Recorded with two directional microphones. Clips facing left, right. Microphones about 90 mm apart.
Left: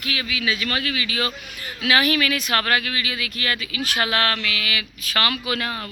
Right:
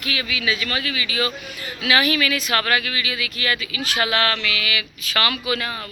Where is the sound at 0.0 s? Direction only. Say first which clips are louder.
Right 1 dB; 35° left (ahead or behind).